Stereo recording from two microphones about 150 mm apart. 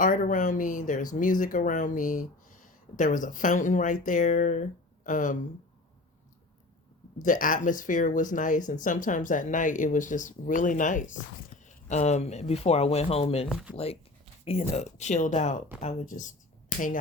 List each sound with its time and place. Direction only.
0.0 s speech: 65° left (ahead or behind)
7.2 s speech: 60° left (ahead or behind); by 13.5 s 40° left (ahead or behind)
13.5 s speech: 5° right (ahead or behind)
13.7 s speech: 40° left (ahead or behind); by 17.0 s 60° left (ahead or behind)